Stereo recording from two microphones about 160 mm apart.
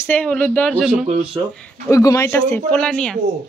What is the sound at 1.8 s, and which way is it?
Speech, 20° left (ahead or behind).